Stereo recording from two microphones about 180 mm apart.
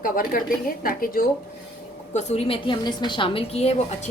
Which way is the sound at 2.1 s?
40° left (ahead or behind).